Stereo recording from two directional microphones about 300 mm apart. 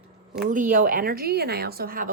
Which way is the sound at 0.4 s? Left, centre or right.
Right.